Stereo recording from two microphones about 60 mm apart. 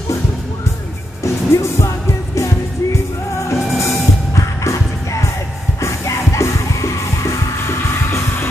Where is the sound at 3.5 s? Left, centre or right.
Centre.